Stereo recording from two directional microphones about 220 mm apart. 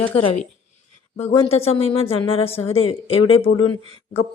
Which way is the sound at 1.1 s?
30° left (ahead or behind).